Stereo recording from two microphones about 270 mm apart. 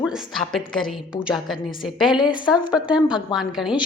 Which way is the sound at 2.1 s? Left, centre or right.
Centre.